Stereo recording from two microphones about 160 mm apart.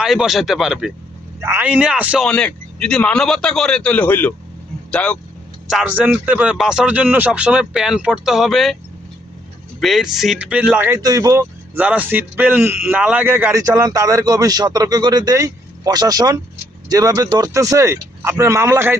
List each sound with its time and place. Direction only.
0.0 s a man's voice: 5° right (ahead or behind)
1.4 s speech: 15° right (ahead or behind)
2.2 s a man's voice: 5° left (ahead or behind)
5.6 s speech: 5° right (ahead or behind)
9.8 s speech: centre (ahead or behind)